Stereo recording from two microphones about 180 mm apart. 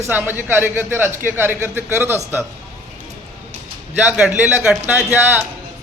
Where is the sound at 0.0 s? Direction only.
10° right (ahead or behind).